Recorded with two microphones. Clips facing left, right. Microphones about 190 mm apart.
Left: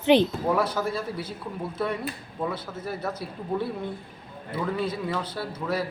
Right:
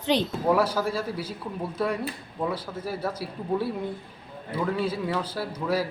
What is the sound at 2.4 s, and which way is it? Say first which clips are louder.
A man's voice: right 1 dB; 10° right (ahead or behind).